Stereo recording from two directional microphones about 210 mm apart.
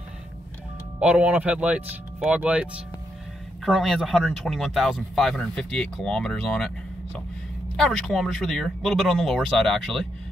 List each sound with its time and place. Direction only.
0.9 s speech: 5° right (ahead or behind)
7.7 s speech: centre (ahead or behind)